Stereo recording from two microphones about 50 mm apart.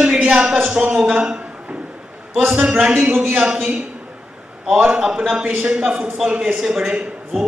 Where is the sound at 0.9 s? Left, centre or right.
Centre.